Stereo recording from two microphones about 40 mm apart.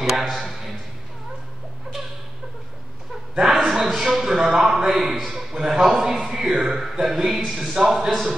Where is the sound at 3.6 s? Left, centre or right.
Centre.